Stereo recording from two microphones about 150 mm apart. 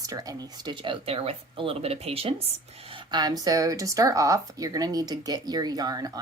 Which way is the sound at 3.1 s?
25° right (ahead or behind).